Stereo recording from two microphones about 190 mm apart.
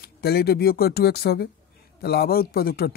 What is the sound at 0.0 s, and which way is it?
Speech, 55° left (ahead or behind).